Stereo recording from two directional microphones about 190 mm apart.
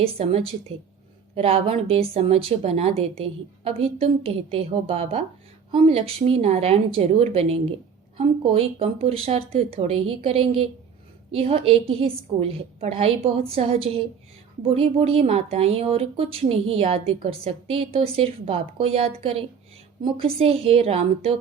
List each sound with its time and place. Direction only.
0.0 s a woman's voice: 30° right (ahead or behind)